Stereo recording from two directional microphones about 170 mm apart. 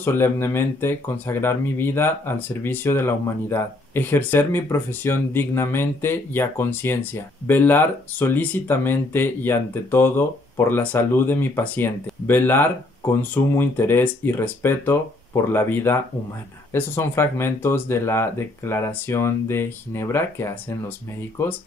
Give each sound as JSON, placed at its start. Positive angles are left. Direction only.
{"t": 0.0, "sound": "speech", "side_deg": 15}